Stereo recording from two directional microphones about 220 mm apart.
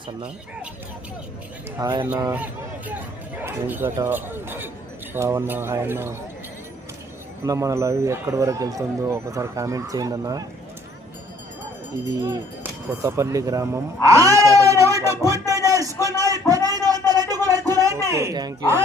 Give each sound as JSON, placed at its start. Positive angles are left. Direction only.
{"t": 1.8, "sound": "speech", "side_deg": -15}
{"t": 7.4, "sound": "speech", "side_deg": -15}
{"t": 12.1, "sound": "speech", "side_deg": -15}
{"t": 16.6, "sound": "a sound", "side_deg": -15}